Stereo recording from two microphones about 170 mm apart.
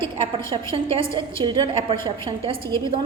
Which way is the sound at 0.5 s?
30° right (ahead or behind).